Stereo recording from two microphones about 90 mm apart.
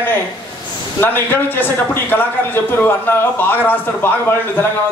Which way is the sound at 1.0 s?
25° left (ahead or behind).